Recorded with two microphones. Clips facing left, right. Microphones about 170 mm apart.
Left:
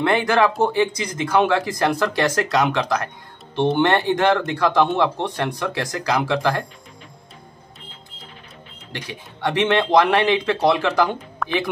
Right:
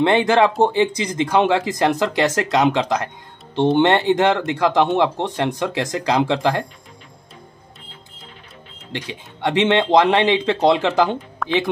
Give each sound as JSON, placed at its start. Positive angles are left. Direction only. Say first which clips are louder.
{"t": 0.0, "sound": "speech", "louder": "right 3 dB", "side_deg": -25}
{"t": 8.9, "sound": "speech", "louder": "right 3 dB", "side_deg": -20}
{"t": 11.4, "sound": "speech", "louder": "right 2 dB", "side_deg": 0}